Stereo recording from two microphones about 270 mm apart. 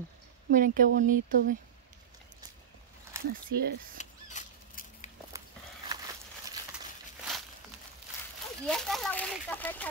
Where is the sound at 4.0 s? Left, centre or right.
Left.